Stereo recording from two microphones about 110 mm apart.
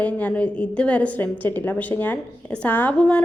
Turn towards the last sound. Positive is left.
turn(degrees=10)  # may be behind; listen again after turning